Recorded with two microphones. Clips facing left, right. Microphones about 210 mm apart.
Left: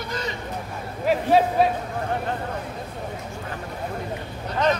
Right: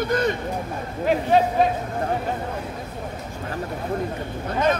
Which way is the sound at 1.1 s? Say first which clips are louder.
Even; 5° left (ahead or behind).